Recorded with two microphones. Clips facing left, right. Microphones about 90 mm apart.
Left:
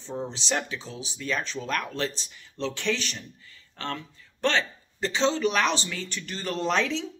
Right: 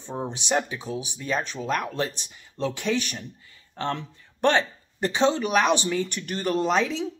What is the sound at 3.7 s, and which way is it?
Speech, 25° right (ahead or behind).